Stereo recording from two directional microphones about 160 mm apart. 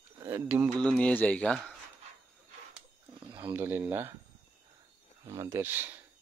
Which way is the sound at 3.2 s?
30° right (ahead or behind).